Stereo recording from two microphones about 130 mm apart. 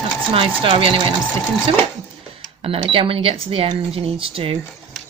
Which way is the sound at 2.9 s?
45° right (ahead or behind).